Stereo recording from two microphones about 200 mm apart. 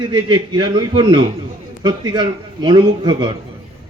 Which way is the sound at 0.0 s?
25° right (ahead or behind).